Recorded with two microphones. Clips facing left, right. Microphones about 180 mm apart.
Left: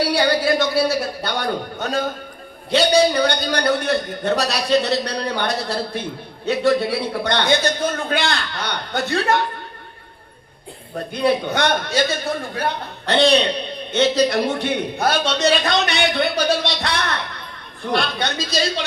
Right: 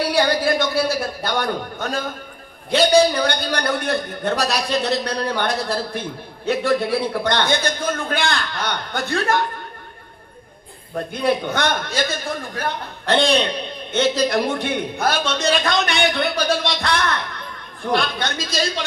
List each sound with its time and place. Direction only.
0.1 s a man's voice: 50° right (ahead or behind)
11.1 s a man's voice: 50° right (ahead or behind)